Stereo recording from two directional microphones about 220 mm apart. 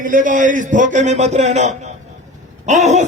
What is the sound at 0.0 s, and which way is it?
A man's voice, 35° right (ahead or behind).